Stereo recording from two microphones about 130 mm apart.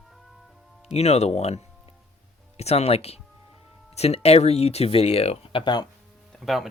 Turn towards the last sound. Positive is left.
turn(degrees=0)  # may be behind; listen again after turning